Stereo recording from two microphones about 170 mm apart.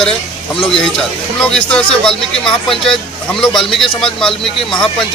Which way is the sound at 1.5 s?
5° left (ahead or behind).